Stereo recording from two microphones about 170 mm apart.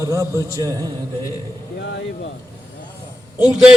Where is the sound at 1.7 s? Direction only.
90° left.